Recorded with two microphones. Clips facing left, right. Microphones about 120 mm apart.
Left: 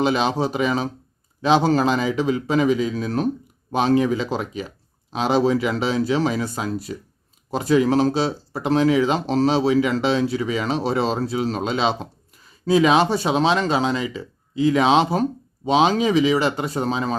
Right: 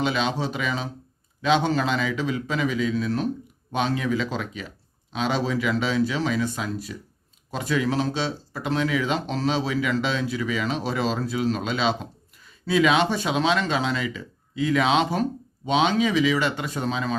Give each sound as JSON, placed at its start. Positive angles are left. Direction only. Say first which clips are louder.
{"t": 0.0, "sound": "speech", "louder": "left 5 dB", "side_deg": 40}